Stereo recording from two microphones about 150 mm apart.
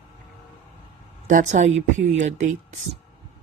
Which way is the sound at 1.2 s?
55° right (ahead or behind).